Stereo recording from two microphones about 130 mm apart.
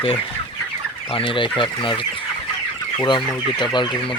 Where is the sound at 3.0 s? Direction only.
35° left (ahead or behind).